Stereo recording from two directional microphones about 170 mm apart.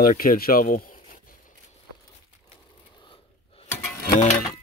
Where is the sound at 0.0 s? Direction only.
55° left (ahead or behind).